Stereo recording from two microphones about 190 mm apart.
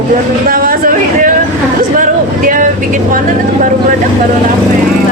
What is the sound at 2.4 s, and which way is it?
Vehicle, 45° right (ahead or behind).